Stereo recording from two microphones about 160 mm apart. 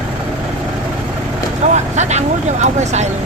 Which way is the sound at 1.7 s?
45° right (ahead or behind).